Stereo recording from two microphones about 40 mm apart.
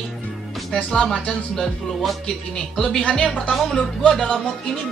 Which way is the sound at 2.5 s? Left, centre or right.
Centre.